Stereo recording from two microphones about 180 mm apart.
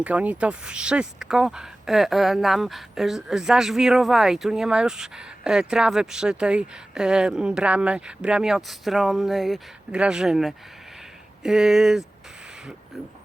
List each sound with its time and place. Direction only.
0.0 s speech: 5° right (ahead or behind)